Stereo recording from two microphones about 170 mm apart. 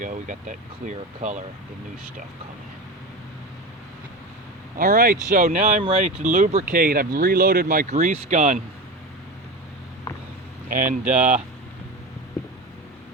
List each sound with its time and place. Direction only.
0.0 s speech: 50° right (ahead or behind)
4.8 s speech: 55° right (ahead or behind)
5.8 s speech: 40° right (ahead or behind)
10.7 s speech: 50° right (ahead or behind)